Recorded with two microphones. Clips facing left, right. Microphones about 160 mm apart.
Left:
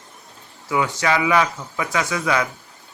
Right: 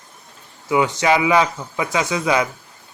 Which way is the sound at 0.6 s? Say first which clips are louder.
Right 4 dB; 20° right (ahead or behind).